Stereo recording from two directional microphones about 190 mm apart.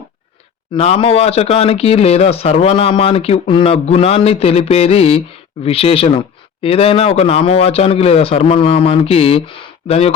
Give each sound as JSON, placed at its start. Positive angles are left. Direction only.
{"t": 0.7, "sound": "speech", "side_deg": 30}